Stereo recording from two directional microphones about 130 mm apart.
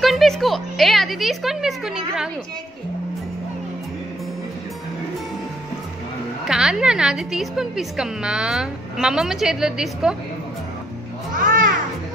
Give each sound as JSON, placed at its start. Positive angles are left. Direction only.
{"t": 0.0, "sound": "a woman's voice", "side_deg": 0}
{"t": 6.4, "sound": "a woman's voice", "side_deg": -5}
{"t": 11.3, "sound": "a sound", "side_deg": -90}